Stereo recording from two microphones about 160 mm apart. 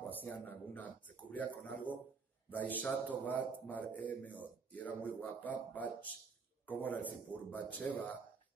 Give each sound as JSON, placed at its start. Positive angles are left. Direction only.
{"t": 0.1, "sound": "speech", "side_deg": 10}